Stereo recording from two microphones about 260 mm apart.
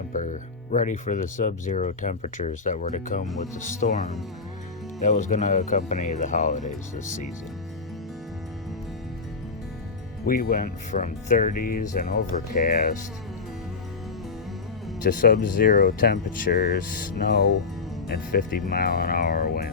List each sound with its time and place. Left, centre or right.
0.1 s speech: left
10.2 s speech: left
15.0 s speech: left